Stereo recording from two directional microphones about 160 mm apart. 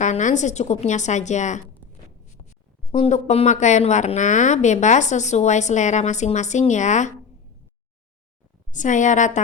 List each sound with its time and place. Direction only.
0.0 s a woman's voice: 50° left (ahead or behind)
2.9 s a woman's voice: 45° left (ahead or behind)
8.7 s a woman's voice: 50° left (ahead or behind)